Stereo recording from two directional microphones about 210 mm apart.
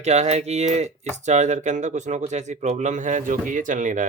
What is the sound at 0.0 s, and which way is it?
Speech, 30° right (ahead or behind).